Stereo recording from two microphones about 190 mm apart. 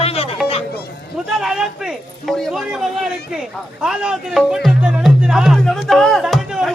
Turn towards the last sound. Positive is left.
turn(degrees=0)  # may be behind; listen again after turning